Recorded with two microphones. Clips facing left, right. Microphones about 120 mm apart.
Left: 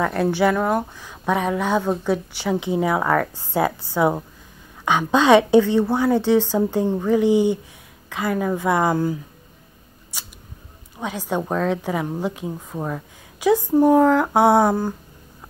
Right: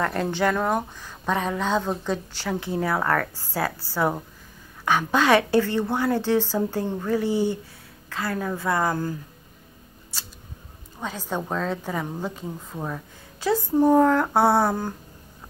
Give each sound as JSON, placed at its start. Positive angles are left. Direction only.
{"t": 0.0, "sound": "a woman's voice", "side_deg": 10}
{"t": 3.5, "sound": "a woman's voice", "side_deg": 20}
{"t": 11.0, "sound": "a woman's voice", "side_deg": 10}